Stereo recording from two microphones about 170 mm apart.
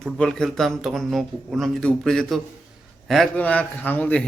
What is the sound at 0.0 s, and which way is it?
A man's voice, 5° left (ahead or behind).